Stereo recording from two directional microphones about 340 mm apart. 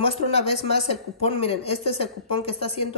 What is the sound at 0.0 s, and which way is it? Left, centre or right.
Speech, centre.